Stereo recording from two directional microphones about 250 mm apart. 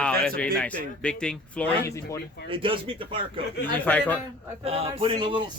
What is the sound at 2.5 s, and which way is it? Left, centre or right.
Speech, right.